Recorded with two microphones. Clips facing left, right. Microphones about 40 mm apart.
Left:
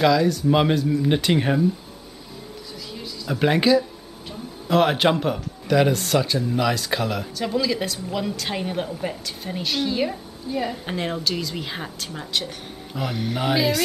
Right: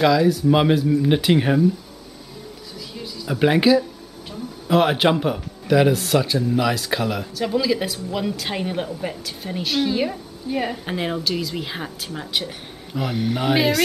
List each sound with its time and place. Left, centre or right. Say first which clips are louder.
0.0 s speech: right 2 dB; centre
2.9 s music: right 1 dB; centre
4.3 s speech: right 2 dB; centre
10.5 s speech: right 2 dB; right
10.9 s speech: right 2 dB; centre